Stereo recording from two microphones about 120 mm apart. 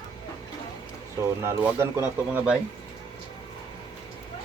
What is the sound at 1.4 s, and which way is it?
Speech, 20° right (ahead or behind).